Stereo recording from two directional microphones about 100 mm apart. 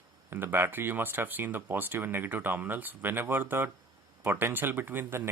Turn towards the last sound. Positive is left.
turn(degrees=-25)  # may be behind; listen again after turning